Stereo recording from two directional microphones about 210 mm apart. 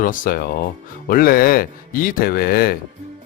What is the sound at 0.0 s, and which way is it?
Speech, 40° left (ahead or behind).